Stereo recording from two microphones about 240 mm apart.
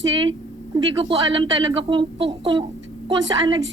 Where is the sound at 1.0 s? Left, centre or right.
Centre.